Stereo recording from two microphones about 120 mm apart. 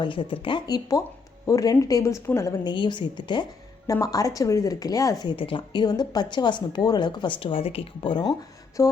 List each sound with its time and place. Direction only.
0.0 s speech: 45° left (ahead or behind)
1.5 s speech: 25° left (ahead or behind)
2.6 s speech: 40° left (ahead or behind)
4.0 s speech: 30° left (ahead or behind)
5.4 s speech: 45° left (ahead or behind)
8.3 s speech: 30° left (ahead or behind)